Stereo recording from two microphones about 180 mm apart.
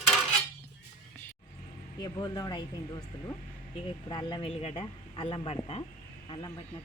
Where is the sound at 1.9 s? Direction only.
20° left (ahead or behind).